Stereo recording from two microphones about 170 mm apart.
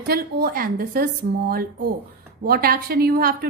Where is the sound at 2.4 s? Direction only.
60° right (ahead or behind).